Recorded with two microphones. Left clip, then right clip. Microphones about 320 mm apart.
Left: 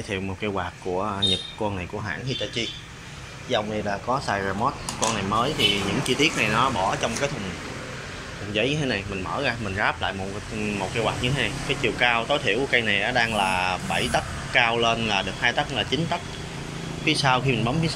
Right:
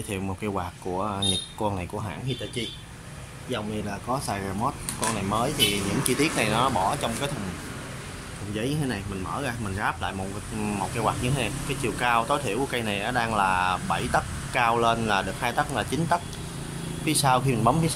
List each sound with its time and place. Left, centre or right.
0.1 s speech: centre
4.1 s speech: centre
6.0 s speech: centre
8.5 s speech: centre